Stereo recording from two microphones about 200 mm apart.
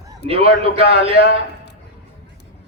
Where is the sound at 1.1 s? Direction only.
60° left (ahead or behind).